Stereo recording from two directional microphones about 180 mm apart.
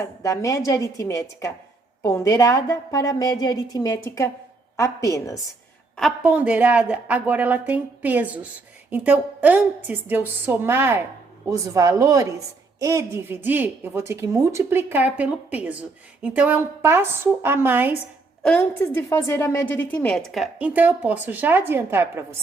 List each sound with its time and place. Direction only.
0.0 s a woman's voice: 20° left (ahead or behind)
6.0 s a woman's voice: 5° right (ahead or behind)
18.4 s a woman's voice: 5° left (ahead or behind); by 22.4 s 15° right (ahead or behind)